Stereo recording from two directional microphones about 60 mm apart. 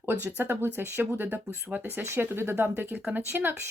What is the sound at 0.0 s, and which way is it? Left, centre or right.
Speech, right.